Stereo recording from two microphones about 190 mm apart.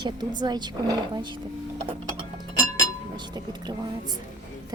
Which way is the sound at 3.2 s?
20° right (ahead or behind).